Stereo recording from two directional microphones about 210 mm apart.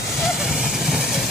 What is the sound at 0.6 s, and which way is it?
Vehicle, centre (ahead or behind).